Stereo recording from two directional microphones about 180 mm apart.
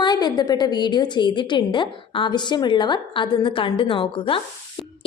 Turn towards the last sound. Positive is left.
turn(degrees=30)  # may be behind; listen again after turning